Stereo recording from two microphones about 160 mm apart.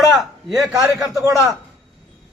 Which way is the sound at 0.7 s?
20° right (ahead or behind).